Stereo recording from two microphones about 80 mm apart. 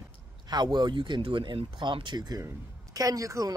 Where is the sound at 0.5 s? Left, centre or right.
Right.